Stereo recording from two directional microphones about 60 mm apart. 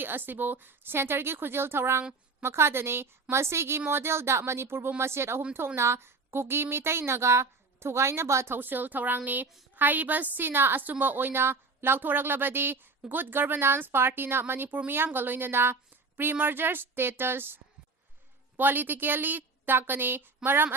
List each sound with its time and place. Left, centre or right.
0.0 s a woman's voice: right
8.5 s a woman's voice: right